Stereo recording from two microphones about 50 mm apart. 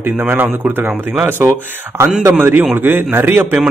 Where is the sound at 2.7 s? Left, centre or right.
Right.